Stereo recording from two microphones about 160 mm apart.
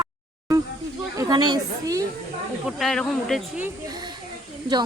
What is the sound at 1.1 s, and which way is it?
Speech, 25° right (ahead or behind).